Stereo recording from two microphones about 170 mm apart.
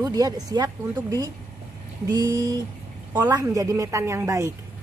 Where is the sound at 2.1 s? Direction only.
25° right (ahead or behind).